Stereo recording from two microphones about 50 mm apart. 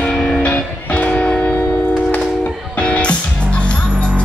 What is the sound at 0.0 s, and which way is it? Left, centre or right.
Music, centre.